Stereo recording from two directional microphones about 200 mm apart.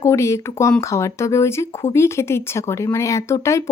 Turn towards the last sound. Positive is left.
turn(degrees=15)  # may be behind; listen again after turning